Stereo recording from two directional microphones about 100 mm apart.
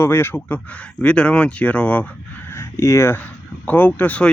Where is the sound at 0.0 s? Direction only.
20° left (ahead or behind).